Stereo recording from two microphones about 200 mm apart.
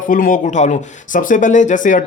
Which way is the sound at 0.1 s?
40° left (ahead or behind).